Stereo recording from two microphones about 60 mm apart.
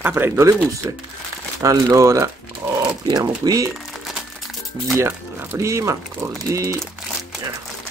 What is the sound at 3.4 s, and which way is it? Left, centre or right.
Speech, right.